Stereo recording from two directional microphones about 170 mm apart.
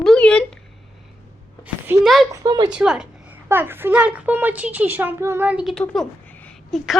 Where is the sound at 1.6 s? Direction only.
5° right (ahead or behind).